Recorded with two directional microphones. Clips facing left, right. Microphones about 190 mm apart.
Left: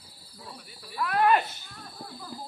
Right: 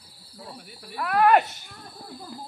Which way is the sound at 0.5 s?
55° right (ahead or behind).